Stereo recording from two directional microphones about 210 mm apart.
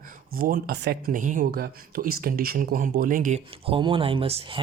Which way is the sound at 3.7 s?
25° right (ahead or behind).